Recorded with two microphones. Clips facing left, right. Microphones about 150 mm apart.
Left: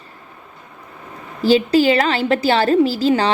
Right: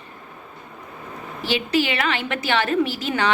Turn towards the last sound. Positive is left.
turn(degrees=35)  # may be behind; listen again after turning